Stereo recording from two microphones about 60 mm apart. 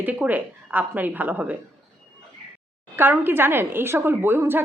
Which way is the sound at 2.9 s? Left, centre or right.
Right.